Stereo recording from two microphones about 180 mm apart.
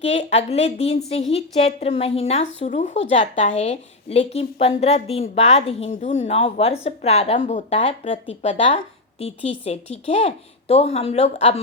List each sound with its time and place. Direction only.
0.0 s speech: 35° left (ahead or behind)